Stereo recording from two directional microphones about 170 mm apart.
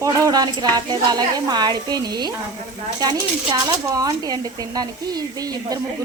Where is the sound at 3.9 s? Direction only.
20° right (ahead or behind).